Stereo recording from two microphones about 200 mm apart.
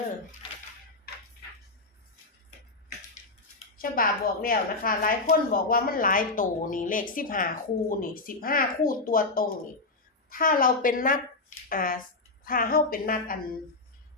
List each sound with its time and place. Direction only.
3.8 s a woman's voice: 45° left (ahead or behind)